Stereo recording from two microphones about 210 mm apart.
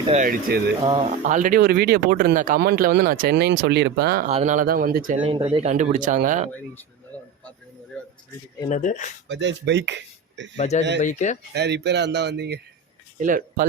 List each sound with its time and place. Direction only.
0.1 s speech: 40° right (ahead or behind)
0.8 s speech: 25° right (ahead or behind)
1.1 s speech: 35° right (ahead or behind)
4.3 s speech: 30° right (ahead or behind)
5.5 s speech: 30° right (ahead or behind)
7.1 s a sound: 5° left (ahead or behind)
8.7 s speech: 35° left (ahead or behind)
9.3 s speech: 55° right (ahead or behind)
10.6 s speech: 35° left (ahead or behind)
11.5 s speech: 55° right (ahead or behind)
13.1 s speech: 40° right (ahead or behind)